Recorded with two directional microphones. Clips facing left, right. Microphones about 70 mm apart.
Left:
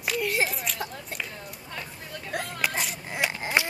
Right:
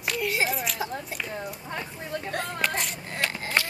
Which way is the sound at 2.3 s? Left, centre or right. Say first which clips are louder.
Left 1 dB; centre.